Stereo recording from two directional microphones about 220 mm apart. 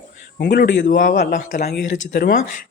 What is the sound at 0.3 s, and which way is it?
Speech, 50° left (ahead or behind).